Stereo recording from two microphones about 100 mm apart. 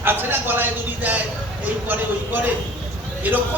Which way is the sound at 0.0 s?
20° right (ahead or behind).